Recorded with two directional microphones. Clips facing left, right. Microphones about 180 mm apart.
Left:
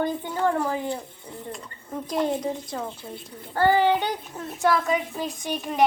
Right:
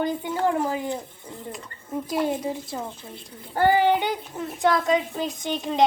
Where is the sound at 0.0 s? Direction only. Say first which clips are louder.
Even; 15° right (ahead or behind).